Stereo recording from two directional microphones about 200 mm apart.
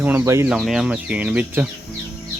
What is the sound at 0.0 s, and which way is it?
Speech, 10° right (ahead or behind).